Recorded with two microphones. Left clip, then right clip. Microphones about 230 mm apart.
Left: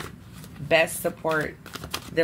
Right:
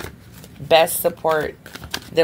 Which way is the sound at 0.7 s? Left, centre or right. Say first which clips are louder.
Right 7 dB; right.